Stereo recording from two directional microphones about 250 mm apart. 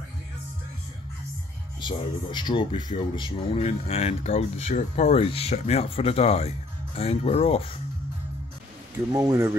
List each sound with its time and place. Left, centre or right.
1.8 s speech: centre
9.1 s speech: centre